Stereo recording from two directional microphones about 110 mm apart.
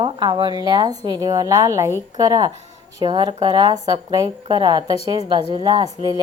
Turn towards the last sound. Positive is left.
turn(degrees=-40)  # may be behind; listen again after turning